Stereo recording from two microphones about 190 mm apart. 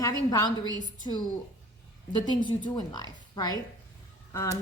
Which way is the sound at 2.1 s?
25° left (ahead or behind).